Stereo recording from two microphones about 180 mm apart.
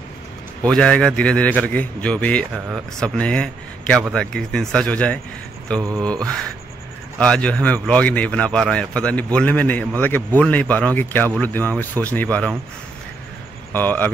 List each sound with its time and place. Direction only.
0.6 s a man's voice: 5° left (ahead or behind)
5.8 s mantra: 20° right (ahead or behind)
6.0 s a man's voice: 5° left (ahead or behind)
13.7 s speech: 10° left (ahead or behind)